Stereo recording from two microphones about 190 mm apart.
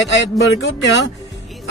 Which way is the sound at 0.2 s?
70° left (ahead or behind).